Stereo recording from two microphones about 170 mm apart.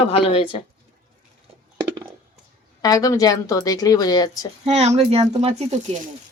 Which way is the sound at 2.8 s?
20° left (ahead or behind).